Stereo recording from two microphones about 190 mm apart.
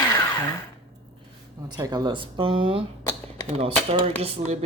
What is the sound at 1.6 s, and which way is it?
Speech, 20° right (ahead or behind).